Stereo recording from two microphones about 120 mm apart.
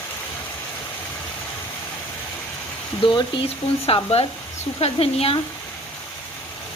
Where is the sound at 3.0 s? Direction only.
45° left (ahead or behind).